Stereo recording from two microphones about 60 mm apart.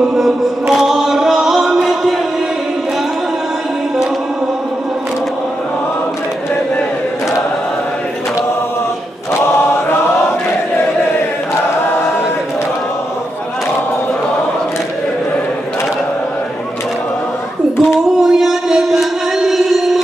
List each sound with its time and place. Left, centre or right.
0.1 s chant: centre
9.4 s chant: left
17.7 s singing: centre